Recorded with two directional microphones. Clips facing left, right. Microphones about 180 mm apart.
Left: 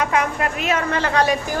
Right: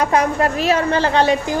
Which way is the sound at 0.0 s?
35° right (ahead or behind).